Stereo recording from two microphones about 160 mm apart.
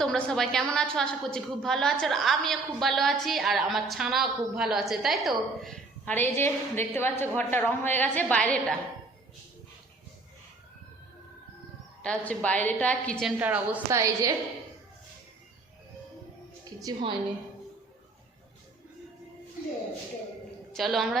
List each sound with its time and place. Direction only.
0.0 s a woman's voice: 5° left (ahead or behind)
12.0 s a woman's voice: 10° left (ahead or behind)
13.4 s a woman's voice: 10° right (ahead or behind)
16.6 s a woman's voice: 25° right (ahead or behind)
20.7 s a woman's voice: centre (ahead or behind)